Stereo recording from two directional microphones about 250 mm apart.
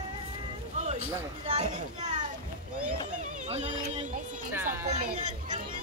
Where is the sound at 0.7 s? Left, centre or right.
Right.